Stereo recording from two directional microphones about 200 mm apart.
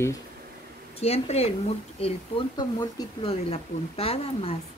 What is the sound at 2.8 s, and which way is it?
A woman's voice, 25° left (ahead or behind).